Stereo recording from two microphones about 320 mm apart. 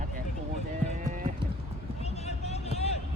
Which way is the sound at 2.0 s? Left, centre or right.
Centre.